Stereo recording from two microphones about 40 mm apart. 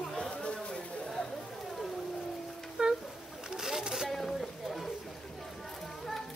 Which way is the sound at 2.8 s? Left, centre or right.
Centre.